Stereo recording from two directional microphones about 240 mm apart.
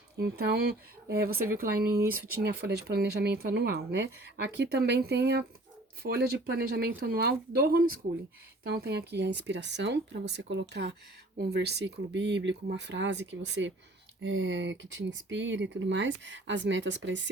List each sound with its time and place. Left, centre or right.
0.2 s speech: right